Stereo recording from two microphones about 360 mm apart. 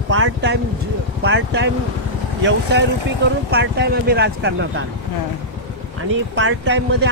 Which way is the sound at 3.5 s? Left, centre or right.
Right.